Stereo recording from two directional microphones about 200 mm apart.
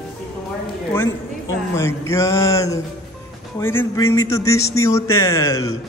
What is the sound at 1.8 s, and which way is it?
Speech, 15° left (ahead or behind).